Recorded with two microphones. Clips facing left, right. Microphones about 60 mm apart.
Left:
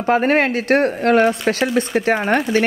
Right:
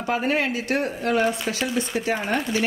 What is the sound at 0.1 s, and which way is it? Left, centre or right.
Speech, left.